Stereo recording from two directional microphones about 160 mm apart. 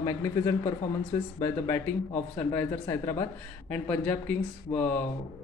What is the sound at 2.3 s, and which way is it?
A man's voice, 15° left (ahead or behind).